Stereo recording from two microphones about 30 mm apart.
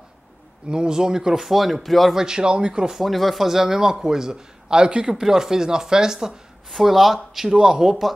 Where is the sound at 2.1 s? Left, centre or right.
Right.